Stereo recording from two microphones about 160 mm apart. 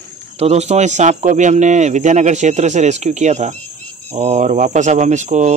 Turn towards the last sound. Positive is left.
turn(degrees=-45)  # may be behind; listen again after turning